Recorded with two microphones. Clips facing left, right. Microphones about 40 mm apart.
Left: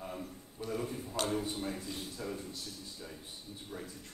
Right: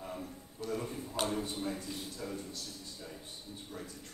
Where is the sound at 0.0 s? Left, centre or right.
Centre.